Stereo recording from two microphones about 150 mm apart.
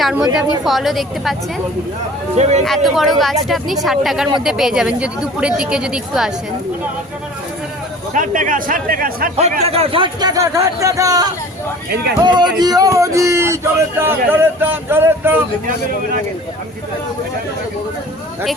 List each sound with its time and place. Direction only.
0.0 s a woman's voice: 5° right (ahead or behind)
2.4 s speech: 50° right (ahead or behind)
2.6 s speech: centre (ahead or behind)
8.1 s speech: 60° right (ahead or behind)
9.3 s speech: 45° right (ahead or behind); by 15.4 s 15° right (ahead or behind)